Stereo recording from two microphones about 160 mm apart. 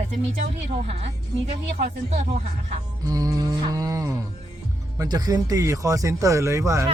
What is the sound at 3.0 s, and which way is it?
Music, 25° right (ahead or behind).